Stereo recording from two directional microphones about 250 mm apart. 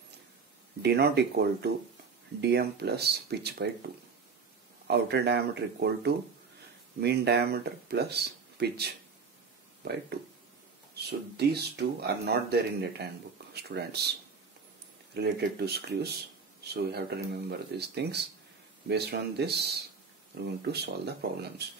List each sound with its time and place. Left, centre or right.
0.8 s speech: right
4.8 s speech: right
11.1 s speech: right
15.1 s speech: right